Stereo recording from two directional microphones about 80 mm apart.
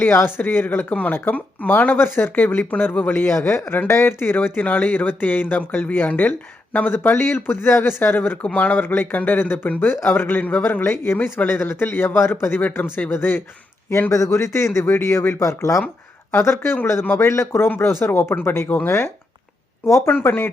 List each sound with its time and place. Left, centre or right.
0.0 s speech: left